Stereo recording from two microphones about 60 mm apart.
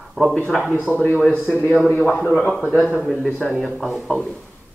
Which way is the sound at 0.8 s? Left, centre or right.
Centre.